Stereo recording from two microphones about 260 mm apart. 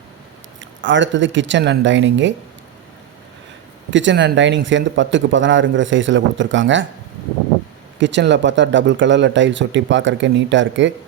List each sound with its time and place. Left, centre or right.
0.6 s speech: right
3.9 s speech: right
7.9 s speech: right